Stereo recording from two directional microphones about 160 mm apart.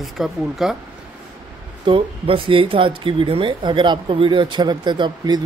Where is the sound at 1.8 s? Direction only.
35° right (ahead or behind).